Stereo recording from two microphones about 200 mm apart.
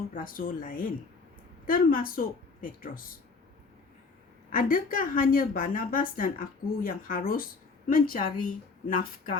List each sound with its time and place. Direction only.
0.1 s a woman's voice: 45° left (ahead or behind)
4.5 s a woman's voice: 45° left (ahead or behind)